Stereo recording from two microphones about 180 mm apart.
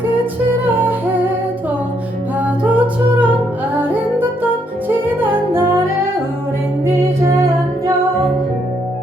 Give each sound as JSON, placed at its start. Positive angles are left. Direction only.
{"t": 0.6, "sound": "music", "side_deg": -10}
{"t": 2.4, "sound": "music", "side_deg": -10}
{"t": 5.0, "sound": "music", "side_deg": -10}